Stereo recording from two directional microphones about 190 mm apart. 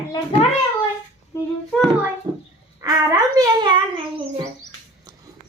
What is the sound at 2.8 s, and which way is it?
A child's voice, 20° right (ahead or behind).